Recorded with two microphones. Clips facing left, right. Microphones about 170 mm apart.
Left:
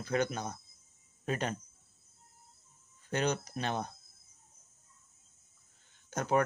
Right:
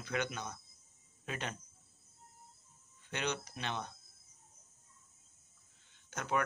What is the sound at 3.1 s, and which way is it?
Speech, 40° left (ahead or behind).